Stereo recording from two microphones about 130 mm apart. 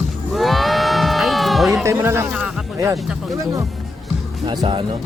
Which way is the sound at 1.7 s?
20° right (ahead or behind).